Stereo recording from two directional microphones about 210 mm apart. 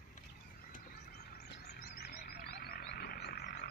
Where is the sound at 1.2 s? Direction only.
50° left (ahead or behind).